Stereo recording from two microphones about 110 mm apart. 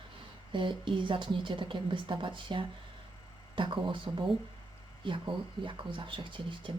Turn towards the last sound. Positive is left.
turn(degrees=-50)  # may be behind; listen again after turning